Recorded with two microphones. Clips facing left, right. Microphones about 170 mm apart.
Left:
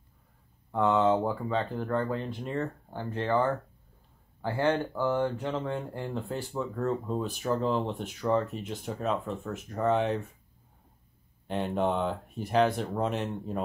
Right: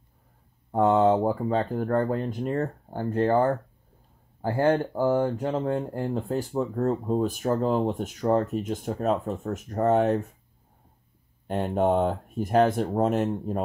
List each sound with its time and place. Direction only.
0.7 s speech: 40° right (ahead or behind)
11.4 s speech: 45° right (ahead or behind)